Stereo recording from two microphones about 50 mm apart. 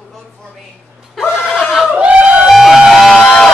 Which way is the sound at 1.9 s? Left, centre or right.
Right.